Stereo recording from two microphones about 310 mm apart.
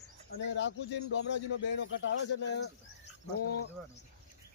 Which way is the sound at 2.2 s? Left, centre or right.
Left.